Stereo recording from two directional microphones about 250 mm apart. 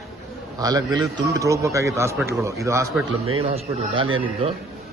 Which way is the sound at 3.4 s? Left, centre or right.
Right.